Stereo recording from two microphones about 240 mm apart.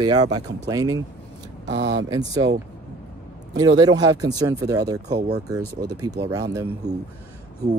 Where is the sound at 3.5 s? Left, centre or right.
Centre.